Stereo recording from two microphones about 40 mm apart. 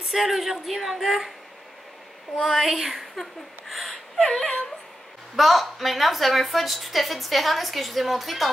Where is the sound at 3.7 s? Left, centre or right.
Centre.